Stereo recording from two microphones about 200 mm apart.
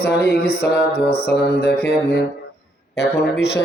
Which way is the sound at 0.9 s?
50° left (ahead or behind).